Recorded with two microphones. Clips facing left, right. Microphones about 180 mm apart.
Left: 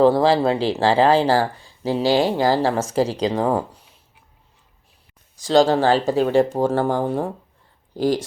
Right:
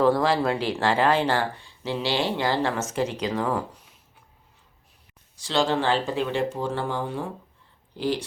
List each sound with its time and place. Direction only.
0.0 s speech: 30° left (ahead or behind)
5.4 s speech: 40° left (ahead or behind)